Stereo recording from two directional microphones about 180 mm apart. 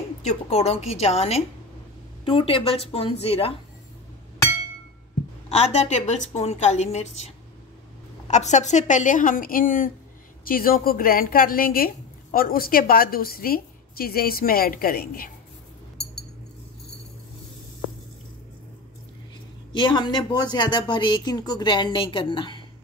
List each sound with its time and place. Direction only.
0.2 s a woman's voice: 35° left (ahead or behind)
5.5 s a woman's voice: 40° left (ahead or behind); by 15.3 s 55° left (ahead or behind)
19.7 s speech: 25° left (ahead or behind)